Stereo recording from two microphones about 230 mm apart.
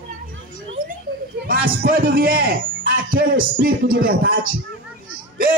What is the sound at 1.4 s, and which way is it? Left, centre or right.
A man's voice, right.